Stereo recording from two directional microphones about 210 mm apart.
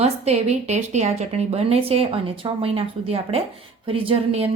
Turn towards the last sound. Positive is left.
turn(degrees=-25)  # may be behind; listen again after turning